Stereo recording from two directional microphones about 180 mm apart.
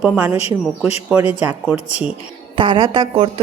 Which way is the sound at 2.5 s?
25° right (ahead or behind).